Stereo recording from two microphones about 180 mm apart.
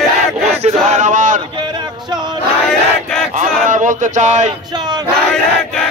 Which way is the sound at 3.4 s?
45° right (ahead or behind).